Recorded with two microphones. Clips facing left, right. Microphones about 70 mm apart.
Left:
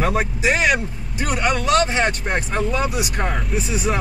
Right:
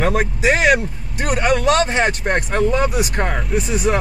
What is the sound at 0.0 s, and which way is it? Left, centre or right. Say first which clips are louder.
Speech: right 3 dB; right.